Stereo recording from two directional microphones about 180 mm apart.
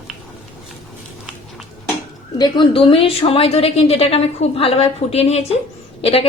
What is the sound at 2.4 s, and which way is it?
A woman's voice, 25° left (ahead or behind).